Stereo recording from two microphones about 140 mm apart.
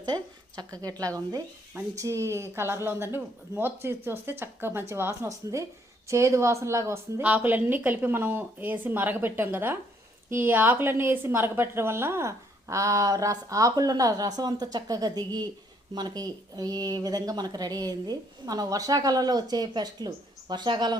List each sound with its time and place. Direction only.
0.0 s a woman's voice: 30° right (ahead or behind)